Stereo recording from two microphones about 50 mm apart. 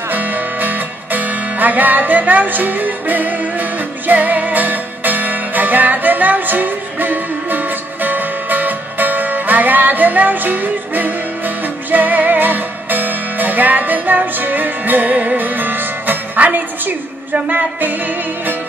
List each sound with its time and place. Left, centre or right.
0.1 s music: right